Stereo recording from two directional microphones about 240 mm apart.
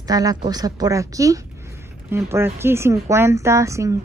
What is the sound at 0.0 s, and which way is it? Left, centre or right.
Speech, centre.